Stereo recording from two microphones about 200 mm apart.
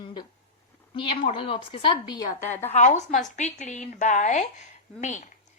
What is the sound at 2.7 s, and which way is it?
A woman's voice, 35° left (ahead or behind).